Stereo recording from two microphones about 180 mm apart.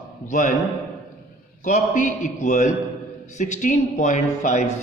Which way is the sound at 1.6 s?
45° left (ahead or behind).